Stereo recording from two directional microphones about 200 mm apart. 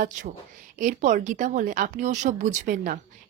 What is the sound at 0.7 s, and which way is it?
Speech, 40° right (ahead or behind).